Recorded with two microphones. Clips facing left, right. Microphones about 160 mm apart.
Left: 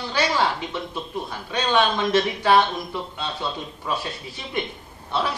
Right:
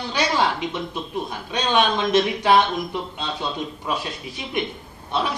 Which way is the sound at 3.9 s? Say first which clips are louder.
Left 2 dB; 15° right (ahead or behind).